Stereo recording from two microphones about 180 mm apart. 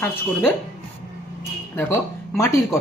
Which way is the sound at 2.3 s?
15° left (ahead or behind).